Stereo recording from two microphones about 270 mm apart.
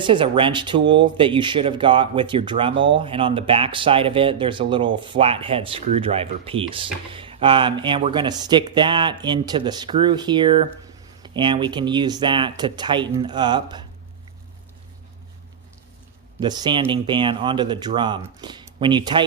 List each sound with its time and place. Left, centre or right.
0.0 s speech: centre
16.4 s speech: centre